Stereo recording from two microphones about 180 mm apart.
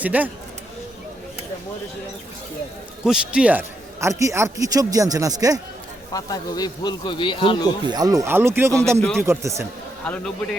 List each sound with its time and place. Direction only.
0.0 s speech: 10° right (ahead or behind)
3.0 s a man's voice: 5° right (ahead or behind)
6.1 s speech: 20° left (ahead or behind)
7.9 s speech: 20° right (ahead or behind)
10.1 s speech: 5° left (ahead or behind)